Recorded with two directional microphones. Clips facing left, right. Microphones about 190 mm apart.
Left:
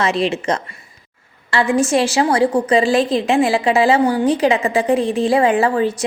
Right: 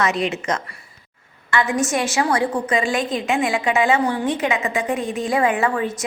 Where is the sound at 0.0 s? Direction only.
30° left (ahead or behind).